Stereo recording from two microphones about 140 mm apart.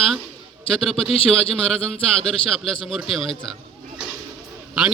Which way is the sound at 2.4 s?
40° left (ahead or behind).